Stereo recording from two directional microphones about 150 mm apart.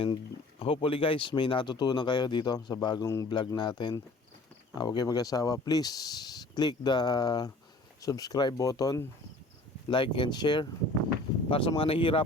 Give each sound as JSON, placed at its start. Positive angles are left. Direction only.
{"t": 0.6, "sound": "speech", "side_deg": 40}